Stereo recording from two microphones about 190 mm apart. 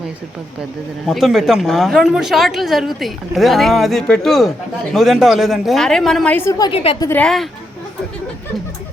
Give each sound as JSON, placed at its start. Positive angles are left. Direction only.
{"t": 1.0, "sound": "speech", "side_deg": 0}
{"t": 6.7, "sound": "a woman's voice", "side_deg": 30}
{"t": 7.0, "sound": "speech", "side_deg": 10}